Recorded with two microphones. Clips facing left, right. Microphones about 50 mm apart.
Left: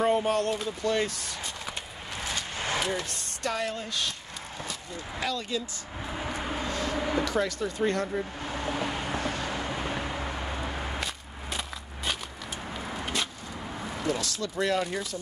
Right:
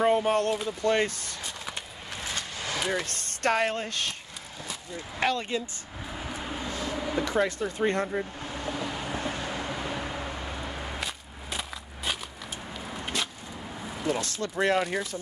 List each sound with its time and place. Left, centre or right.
0.0 s speech: right
2.5 s vehicle: left
3.1 s speech: right
5.2 s speech: right
6.0 s vehicle: left
6.4 s vehicle: left
7.0 s a sound: left
7.2 s speech: right
8.4 s vehicle: left
9.2 s vehicle: right
9.8 s a sound: left
11.0 s walk: centre
13.0 s vehicle: centre
14.2 s speech: right